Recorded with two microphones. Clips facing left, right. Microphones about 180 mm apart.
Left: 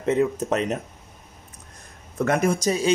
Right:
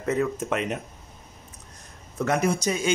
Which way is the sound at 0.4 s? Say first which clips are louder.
Left 3 dB; 35° left (ahead or behind).